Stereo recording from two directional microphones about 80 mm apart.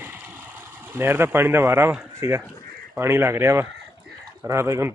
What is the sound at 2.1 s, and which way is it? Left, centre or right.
Speech, right.